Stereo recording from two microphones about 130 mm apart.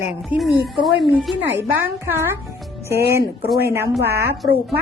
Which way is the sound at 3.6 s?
15° right (ahead or behind).